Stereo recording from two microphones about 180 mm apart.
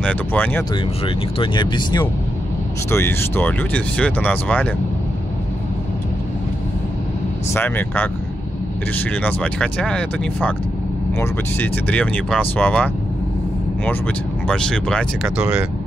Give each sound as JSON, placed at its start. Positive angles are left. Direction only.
{"t": 0.0, "sound": "speech", "side_deg": 10}
{"t": 1.0, "sound": "speech", "side_deg": 25}
{"t": 2.9, "sound": "speech", "side_deg": 15}
{"t": 7.5, "sound": "speech", "side_deg": 10}
{"t": 14.5, "sound": "speech", "side_deg": 5}
{"t": 15.3, "sound": "speech", "side_deg": -10}